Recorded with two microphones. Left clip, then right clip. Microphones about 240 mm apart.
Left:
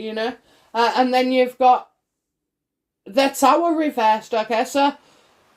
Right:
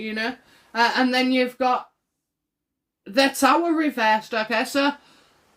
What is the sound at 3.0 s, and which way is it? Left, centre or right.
Speech, centre.